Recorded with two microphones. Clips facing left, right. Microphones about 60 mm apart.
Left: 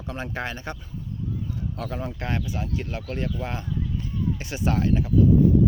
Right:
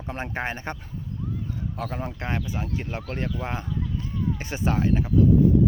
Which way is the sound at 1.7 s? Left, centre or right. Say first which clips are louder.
Right 1 dB; right.